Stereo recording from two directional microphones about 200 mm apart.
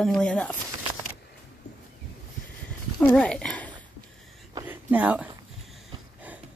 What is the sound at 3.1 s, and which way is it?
Speech, 5° left (ahead or behind).